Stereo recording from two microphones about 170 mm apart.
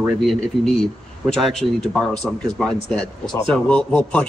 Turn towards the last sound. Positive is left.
turn(degrees=5)  # may be behind; listen again after turning